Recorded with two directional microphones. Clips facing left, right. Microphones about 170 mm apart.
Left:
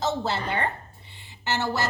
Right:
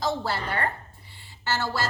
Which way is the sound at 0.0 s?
20° left (ahead or behind).